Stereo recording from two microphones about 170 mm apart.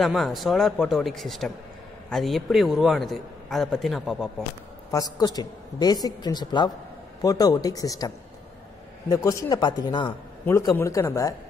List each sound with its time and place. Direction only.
0.0 s a man's voice: centre (ahead or behind)
4.9 s a woman's voice: 20° left (ahead or behind)
9.1 s a woman's voice: 20° left (ahead or behind)